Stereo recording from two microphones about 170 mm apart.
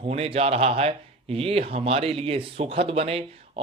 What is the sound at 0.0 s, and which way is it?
Speech, 35° right (ahead or behind).